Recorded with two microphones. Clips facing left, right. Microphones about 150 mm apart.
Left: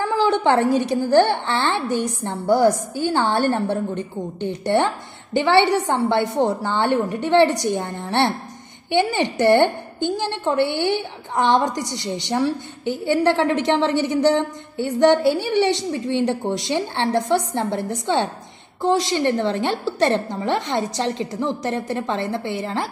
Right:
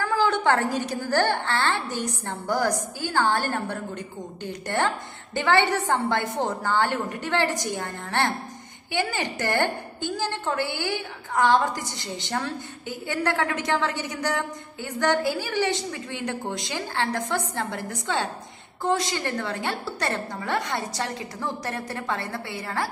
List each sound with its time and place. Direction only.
0.0 s a woman's voice: 20° left (ahead or behind)